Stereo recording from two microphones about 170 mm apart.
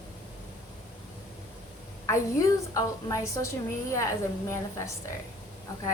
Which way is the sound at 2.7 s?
20° left (ahead or behind).